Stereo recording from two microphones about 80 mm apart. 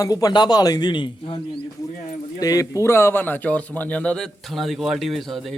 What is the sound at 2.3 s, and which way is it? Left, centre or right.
Speech, left.